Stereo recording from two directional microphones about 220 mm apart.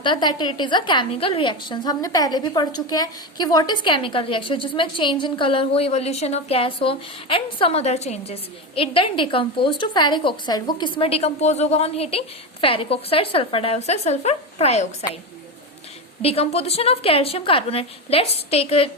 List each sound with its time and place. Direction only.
0.0 s a woman's voice: 20° left (ahead or behind)
16.2 s a woman's voice: 25° left (ahead or behind)